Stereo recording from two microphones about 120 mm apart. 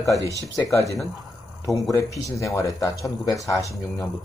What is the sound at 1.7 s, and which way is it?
Speech, 30° left (ahead or behind).